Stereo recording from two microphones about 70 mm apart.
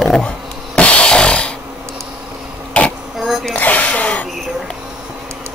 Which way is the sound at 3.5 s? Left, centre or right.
Left.